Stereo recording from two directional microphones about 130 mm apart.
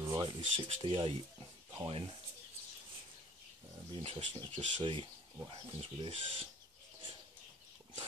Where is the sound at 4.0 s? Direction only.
50° right (ahead or behind).